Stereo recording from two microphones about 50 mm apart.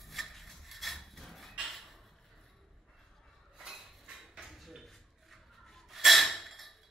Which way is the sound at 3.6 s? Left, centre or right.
Centre.